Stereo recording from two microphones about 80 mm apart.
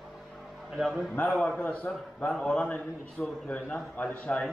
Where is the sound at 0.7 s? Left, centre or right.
Centre.